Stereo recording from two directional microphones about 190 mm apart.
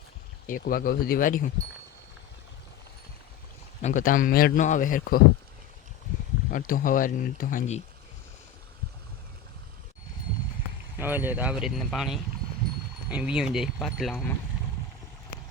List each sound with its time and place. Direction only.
0.4 s a man's voice: 50° left (ahead or behind)
3.8 s a man's voice: 40° left (ahead or behind)
6.5 s a man's voice: 45° left (ahead or behind)
10.9 s speech: 10° right (ahead or behind)